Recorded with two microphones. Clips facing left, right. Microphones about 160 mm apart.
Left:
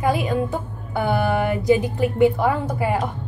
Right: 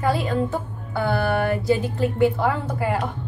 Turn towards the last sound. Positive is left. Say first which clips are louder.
# left 2 dB
turn(degrees=15)  # may be behind; listen again after turning